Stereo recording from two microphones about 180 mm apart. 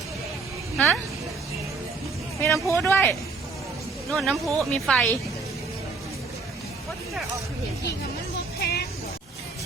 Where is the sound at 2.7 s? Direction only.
15° left (ahead or behind).